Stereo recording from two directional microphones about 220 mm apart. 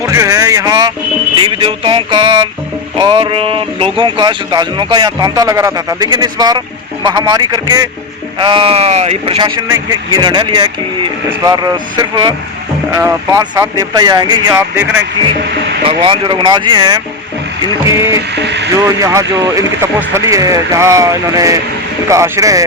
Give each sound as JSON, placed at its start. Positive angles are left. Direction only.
{"t": 0.0, "sound": "a sound", "side_deg": -15}
{"t": 1.4, "sound": "speech", "side_deg": -25}
{"t": 18.3, "sound": "speech", "side_deg": -50}
{"t": 19.0, "sound": "speech", "side_deg": -15}